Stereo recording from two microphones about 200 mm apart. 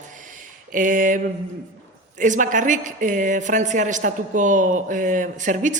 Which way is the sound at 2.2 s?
40° right (ahead or behind).